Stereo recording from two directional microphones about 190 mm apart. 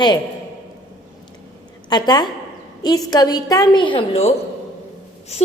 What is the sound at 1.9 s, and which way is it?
A woman's voice, 20° left (ahead or behind).